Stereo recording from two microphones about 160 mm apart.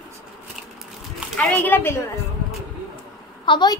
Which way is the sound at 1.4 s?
10° left (ahead or behind).